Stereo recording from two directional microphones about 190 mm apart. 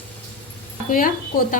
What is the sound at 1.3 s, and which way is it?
Speech, 45° left (ahead or behind).